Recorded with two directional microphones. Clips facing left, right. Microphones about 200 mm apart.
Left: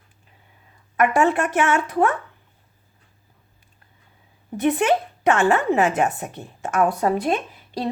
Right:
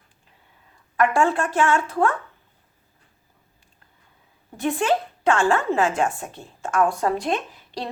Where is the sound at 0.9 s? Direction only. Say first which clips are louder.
Left 1 dB; 20° left (ahead or behind).